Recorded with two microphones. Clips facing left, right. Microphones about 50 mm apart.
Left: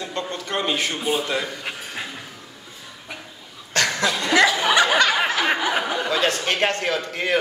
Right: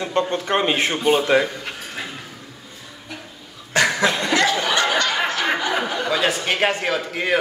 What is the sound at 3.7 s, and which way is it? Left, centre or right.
Cough, centre.